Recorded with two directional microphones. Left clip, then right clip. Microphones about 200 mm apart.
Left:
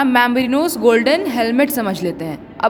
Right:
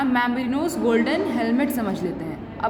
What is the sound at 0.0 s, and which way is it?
A man's voice, 45° left (ahead or behind).